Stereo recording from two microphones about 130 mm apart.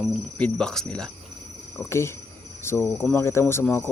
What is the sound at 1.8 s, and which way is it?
Speech, 20° left (ahead or behind).